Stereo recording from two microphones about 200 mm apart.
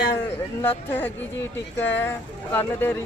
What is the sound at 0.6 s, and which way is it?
A woman's voice, 10° left (ahead or behind).